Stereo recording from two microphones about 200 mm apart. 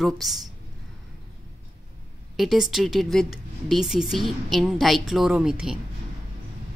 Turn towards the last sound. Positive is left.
turn(degrees=-5)  # may be behind; listen again after turning